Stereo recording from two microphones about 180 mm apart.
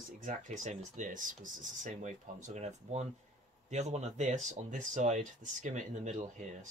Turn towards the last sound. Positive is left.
turn(degrees=-40)  # may be behind; listen again after turning